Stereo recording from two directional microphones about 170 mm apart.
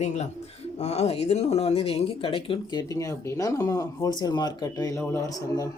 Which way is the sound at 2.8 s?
20° left (ahead or behind).